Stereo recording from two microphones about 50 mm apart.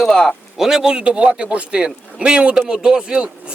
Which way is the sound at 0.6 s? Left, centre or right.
Centre.